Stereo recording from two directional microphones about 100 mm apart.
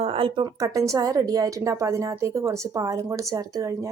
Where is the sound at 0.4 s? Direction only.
35° right (ahead or behind).